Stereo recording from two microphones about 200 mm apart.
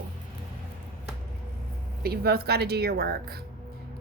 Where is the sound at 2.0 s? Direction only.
50° right (ahead or behind).